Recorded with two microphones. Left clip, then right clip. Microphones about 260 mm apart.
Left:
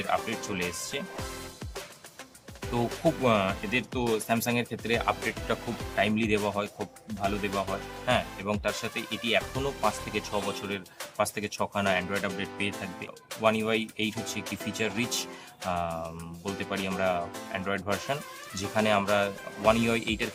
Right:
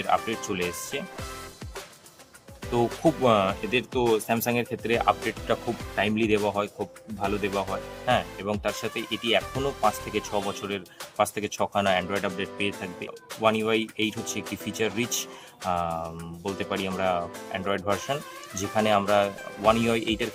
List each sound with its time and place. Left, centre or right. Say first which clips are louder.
0.0 s speech: right 4 dB; centre
2.7 s speech: right 4 dB; centre